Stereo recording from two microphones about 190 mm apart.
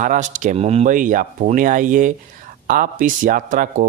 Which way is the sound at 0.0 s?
40° right (ahead or behind).